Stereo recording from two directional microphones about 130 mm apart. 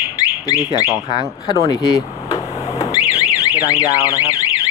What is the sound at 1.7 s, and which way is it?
Alarm, 25° left (ahead or behind).